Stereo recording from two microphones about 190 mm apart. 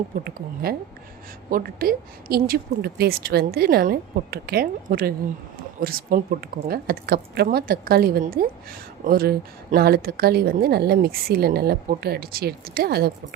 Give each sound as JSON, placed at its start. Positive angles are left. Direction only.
{"t": 0.3, "sound": "a woman's voice", "side_deg": -55}